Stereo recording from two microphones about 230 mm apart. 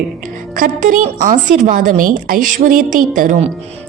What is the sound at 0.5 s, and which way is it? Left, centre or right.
A woman's voice, right.